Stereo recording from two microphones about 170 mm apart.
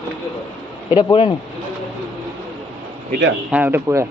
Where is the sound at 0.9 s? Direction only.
25° left (ahead or behind).